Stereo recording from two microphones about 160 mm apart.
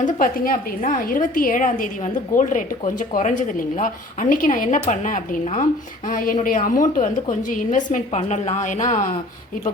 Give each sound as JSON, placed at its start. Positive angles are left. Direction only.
{"t": 0.0, "sound": "a woman's voice", "side_deg": 60}